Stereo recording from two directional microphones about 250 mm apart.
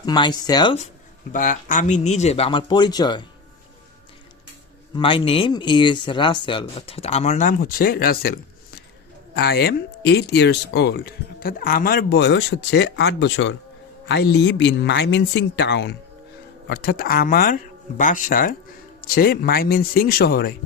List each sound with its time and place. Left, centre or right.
0.0 s speech: centre
1.3 s speech: left
4.9 s speech: centre; by 20.6 s left